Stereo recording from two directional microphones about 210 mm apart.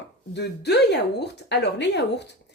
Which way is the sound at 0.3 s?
55° left (ahead or behind).